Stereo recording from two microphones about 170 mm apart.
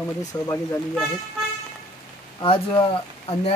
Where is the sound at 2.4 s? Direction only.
30° left (ahead or behind).